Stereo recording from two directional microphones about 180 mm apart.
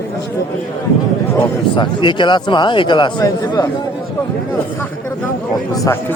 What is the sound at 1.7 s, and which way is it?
Speech, 25° left (ahead or behind).